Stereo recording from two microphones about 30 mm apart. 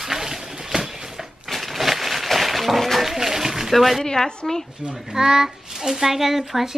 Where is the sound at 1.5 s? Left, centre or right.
Centre.